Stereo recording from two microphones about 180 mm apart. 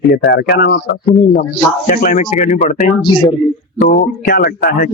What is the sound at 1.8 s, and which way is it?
Speech, 45° left (ahead or behind).